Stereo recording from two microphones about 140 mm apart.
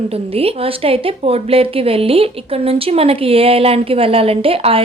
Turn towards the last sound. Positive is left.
turn(degrees=-45)  # may be behind; listen again after turning